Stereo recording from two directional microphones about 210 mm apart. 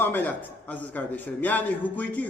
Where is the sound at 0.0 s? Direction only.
10° left (ahead or behind).